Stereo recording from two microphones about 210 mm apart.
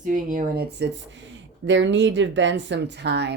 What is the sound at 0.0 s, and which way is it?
Speech, 40° right (ahead or behind).